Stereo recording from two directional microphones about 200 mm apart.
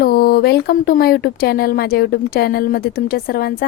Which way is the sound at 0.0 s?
50° left (ahead or behind).